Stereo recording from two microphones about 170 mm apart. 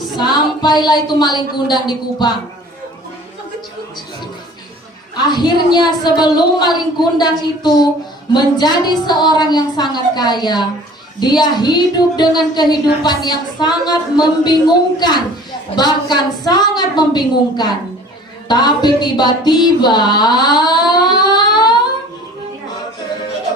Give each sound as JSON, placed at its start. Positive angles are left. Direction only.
{"t": 0.2, "sound": "a woman's voice", "side_deg": 25}
{"t": 5.3, "sound": "a woman's voice", "side_deg": 25}
{"t": 18.4, "sound": "music", "side_deg": 25}